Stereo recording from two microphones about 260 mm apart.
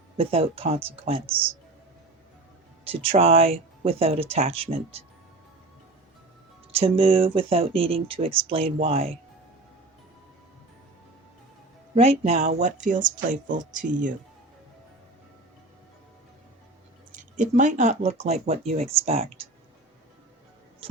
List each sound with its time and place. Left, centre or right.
0.2 s speech: right
2.8 s speech: right
6.7 s speech: right
11.9 s speech: right
17.1 s speech: right